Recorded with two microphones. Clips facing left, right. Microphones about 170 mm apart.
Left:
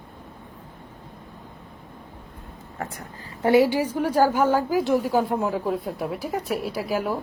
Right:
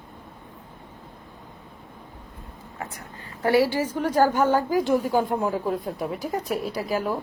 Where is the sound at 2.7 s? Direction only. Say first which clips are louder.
Left 3 dB; 35° left (ahead or behind).